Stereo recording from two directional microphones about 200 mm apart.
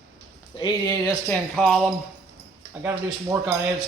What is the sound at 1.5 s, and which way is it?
A man's voice, centre (ahead or behind).